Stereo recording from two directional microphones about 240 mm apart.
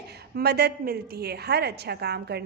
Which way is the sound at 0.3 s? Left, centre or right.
Right.